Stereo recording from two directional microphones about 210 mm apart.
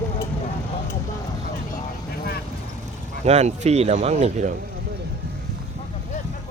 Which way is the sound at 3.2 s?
30° right (ahead or behind).